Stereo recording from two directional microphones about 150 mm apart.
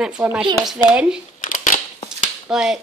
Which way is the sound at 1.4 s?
60° left (ahead or behind).